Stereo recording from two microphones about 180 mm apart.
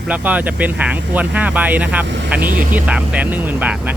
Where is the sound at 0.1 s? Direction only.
10° right (ahead or behind).